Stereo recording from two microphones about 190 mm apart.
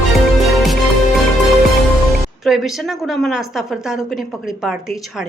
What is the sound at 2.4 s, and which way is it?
A woman's voice, centre (ahead or behind).